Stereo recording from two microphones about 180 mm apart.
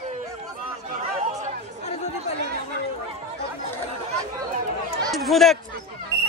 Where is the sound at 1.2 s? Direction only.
40° right (ahead or behind).